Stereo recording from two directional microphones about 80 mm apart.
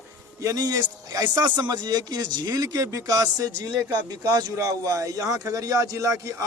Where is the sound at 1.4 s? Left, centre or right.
Right.